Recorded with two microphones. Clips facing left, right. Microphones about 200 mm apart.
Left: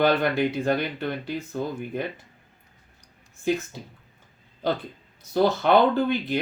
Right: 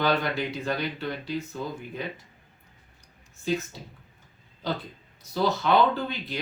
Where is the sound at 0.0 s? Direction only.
55° left (ahead or behind).